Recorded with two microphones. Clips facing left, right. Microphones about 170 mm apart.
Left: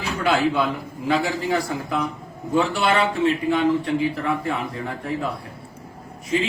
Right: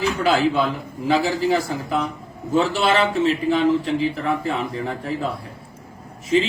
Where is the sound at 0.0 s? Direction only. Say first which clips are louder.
Right 2 dB; centre (ahead or behind).